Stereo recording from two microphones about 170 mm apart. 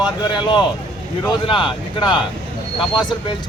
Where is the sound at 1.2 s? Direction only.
30° left (ahead or behind).